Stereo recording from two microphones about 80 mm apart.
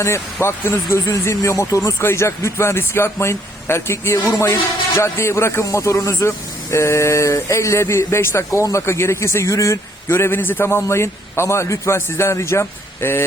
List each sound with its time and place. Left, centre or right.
0.3 s a man's voice: left